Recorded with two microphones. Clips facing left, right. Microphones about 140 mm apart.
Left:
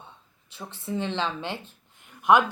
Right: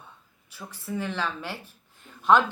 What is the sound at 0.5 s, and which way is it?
A woman's voice, 25° left (ahead or behind).